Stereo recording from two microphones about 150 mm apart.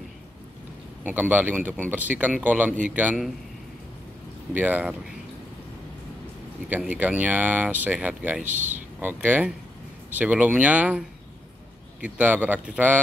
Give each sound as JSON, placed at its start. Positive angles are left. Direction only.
{"t": 1.0, "sound": "speech", "side_deg": -10}
{"t": 4.6, "sound": "speech", "side_deg": -10}
{"t": 6.7, "sound": "speech", "side_deg": -10}